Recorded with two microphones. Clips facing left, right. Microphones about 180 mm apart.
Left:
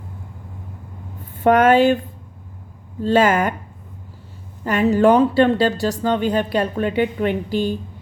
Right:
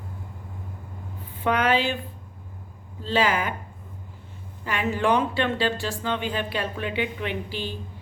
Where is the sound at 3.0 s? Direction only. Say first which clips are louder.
Left 8 dB; 50° left (ahead or behind).